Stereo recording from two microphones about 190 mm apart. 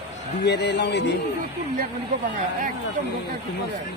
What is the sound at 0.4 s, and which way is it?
Speech, 65° left (ahead or behind).